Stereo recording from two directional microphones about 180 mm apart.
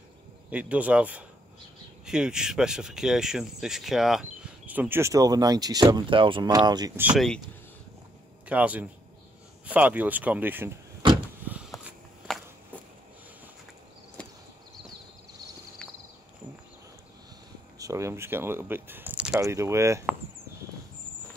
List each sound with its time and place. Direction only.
0.5 s speech: 5° right (ahead or behind); by 6.9 s 20° right (ahead or behind)
7.0 s speech: 10° right (ahead or behind)
8.5 s speech: 10° right (ahead or behind)
11.1 s vehicle: 5° right (ahead or behind)
12.3 s walk: centre (ahead or behind)
14.2 s a sound: 5° left (ahead or behind)
15.8 s a sound: 5° left (ahead or behind)
17.7 s speech: 15° right (ahead or behind)
19.4 s speech: 15° right (ahead or behind)